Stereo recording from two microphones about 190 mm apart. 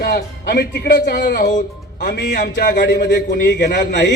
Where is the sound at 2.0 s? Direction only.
65° left (ahead or behind).